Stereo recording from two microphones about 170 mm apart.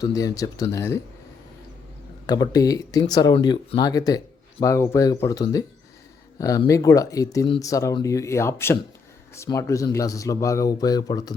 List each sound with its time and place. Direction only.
0.0 s speech: 20° left (ahead or behind)
2.2 s speech: 20° left (ahead or behind)